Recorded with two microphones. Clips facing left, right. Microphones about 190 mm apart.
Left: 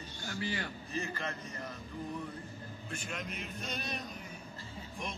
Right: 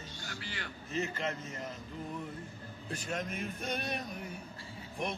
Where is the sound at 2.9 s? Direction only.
40° right (ahead or behind); by 4.0 s 55° right (ahead or behind).